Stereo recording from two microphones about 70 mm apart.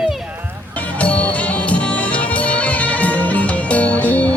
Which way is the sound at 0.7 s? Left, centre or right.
Centre.